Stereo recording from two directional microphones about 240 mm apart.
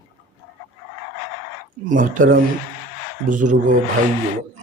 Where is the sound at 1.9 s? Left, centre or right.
Right.